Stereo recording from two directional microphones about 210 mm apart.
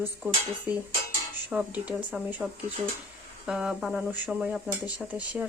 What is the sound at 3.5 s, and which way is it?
Speech, 5° right (ahead or behind).